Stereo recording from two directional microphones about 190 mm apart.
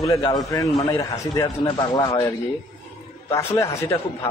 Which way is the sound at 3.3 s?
15° left (ahead or behind).